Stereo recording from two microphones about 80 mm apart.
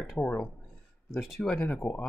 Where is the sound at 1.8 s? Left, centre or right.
Left.